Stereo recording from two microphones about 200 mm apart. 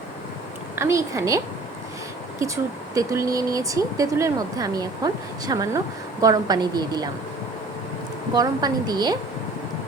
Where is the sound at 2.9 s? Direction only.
15° right (ahead or behind).